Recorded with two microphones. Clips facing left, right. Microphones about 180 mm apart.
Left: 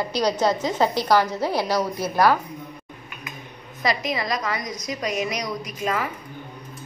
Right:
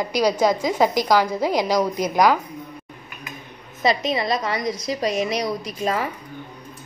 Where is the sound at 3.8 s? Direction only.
25° right (ahead or behind).